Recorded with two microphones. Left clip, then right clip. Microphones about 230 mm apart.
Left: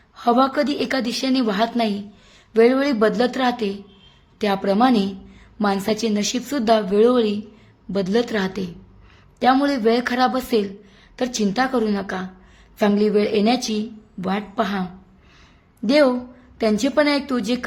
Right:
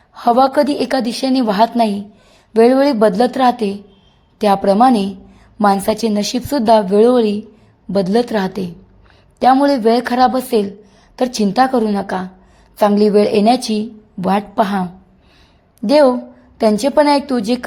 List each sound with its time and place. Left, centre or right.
0.1 s a woman's voice: right
15.9 s a woman's voice: centre